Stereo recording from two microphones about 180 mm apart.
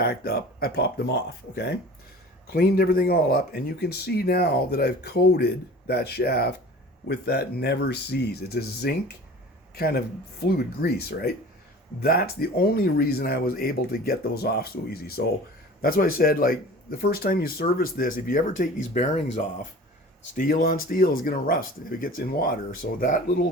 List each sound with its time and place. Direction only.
0.0 s speech: 60° left (ahead or behind); by 19.5 s 40° left (ahead or behind)
20.3 s speech: 50° left (ahead or behind)